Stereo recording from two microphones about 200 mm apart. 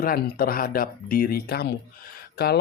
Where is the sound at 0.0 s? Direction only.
45° left (ahead or behind).